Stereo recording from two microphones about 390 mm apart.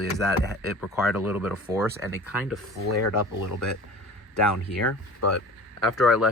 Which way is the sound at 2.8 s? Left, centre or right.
Left.